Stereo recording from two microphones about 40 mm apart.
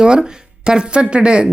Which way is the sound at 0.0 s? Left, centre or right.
Centre.